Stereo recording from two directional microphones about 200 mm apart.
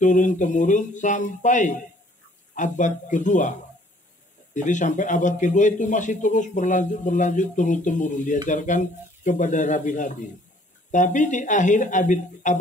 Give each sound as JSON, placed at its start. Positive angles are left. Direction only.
{"t": 0.0, "sound": "a man's voice", "side_deg": 40}
{"t": 4.6, "sound": "a man's voice", "side_deg": 40}